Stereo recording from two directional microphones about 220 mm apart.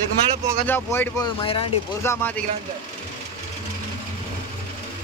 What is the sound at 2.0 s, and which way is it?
Speech, 10° left (ahead or behind).